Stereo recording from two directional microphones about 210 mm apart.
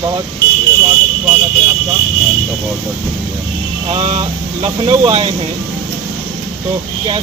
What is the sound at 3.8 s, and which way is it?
Speech, 30° right (ahead or behind).